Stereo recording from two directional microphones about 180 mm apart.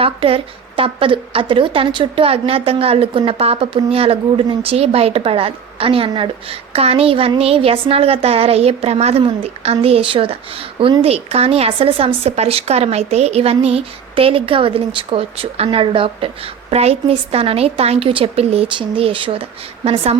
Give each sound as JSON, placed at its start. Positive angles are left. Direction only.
{"t": 0.0, "sound": "a woman's voice", "side_deg": -30}